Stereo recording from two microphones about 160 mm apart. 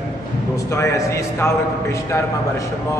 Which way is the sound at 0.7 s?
20° left (ahead or behind).